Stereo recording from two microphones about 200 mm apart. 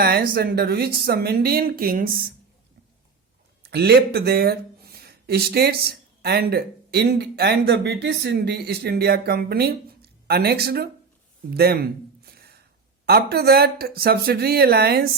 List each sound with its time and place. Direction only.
0.0 s speech: 50° right (ahead or behind)
3.6 s speech: 55° right (ahead or behind)
11.5 s a sound: 50° right (ahead or behind)
13.1 s speech: 50° right (ahead or behind)